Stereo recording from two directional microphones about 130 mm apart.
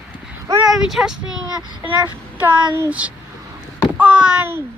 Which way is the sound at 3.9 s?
10° right (ahead or behind).